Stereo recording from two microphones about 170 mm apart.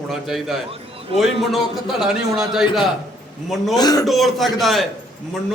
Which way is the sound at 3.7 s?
25° left (ahead or behind).